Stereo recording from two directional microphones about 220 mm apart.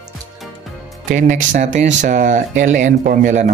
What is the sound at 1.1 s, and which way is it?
Speech, 35° right (ahead or behind).